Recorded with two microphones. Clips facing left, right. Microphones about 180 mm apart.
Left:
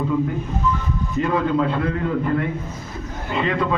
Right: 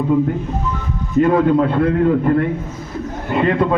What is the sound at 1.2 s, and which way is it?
Speech, 50° right (ahead or behind).